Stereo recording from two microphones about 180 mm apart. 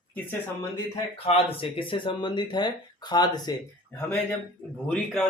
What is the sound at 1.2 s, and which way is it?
Speech, 30° left (ahead or behind).